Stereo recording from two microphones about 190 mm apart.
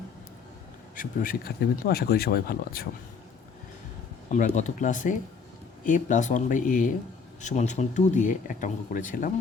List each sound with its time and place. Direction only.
0.9 s speech: 45° left (ahead or behind)
4.3 s speech: 40° left (ahead or behind)